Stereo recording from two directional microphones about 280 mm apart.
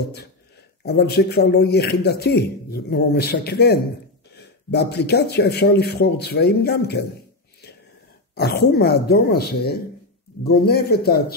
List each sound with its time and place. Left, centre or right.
0.8 s a man's voice: left
8.4 s a man's voice: left